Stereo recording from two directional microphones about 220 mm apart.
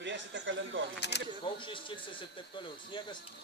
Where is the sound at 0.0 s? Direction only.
60° right (ahead or behind).